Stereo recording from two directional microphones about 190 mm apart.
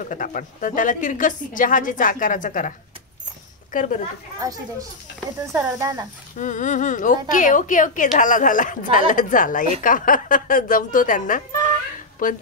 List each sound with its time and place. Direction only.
0.1 s a woman's voice: 45° left (ahead or behind)
3.7 s a woman's voice: 45° left (ahead or behind)
4.4 s speech: 20° right (ahead or behind)
6.3 s a woman's voice: 40° left (ahead or behind)